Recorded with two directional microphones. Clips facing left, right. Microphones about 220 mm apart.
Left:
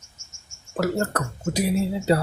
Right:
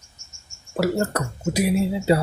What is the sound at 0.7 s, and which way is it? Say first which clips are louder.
Speech: right 2 dB; 10° right (ahead or behind).